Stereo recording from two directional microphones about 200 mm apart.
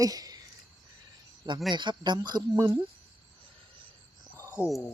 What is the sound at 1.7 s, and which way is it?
Speech, 20° right (ahead or behind).